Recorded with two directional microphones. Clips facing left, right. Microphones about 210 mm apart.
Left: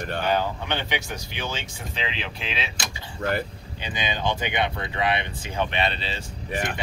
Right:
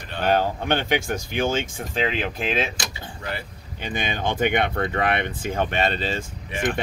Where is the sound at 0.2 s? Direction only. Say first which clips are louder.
Right 5 dB; 50° right (ahead or behind).